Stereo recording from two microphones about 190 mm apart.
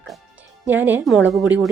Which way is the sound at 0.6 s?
10° right (ahead or behind).